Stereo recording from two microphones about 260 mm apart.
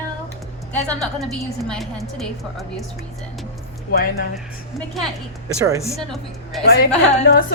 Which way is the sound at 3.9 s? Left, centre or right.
Left.